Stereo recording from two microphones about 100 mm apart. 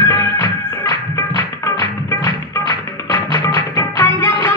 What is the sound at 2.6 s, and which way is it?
Music, 35° left (ahead or behind).